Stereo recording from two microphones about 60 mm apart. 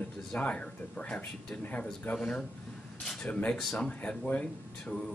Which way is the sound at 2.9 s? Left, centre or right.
Centre.